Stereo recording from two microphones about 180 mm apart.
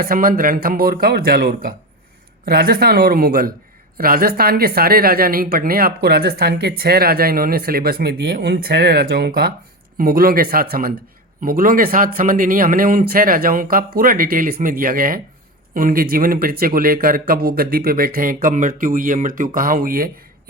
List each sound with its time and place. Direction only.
0.0 s a woman's voice: 55° right (ahead or behind)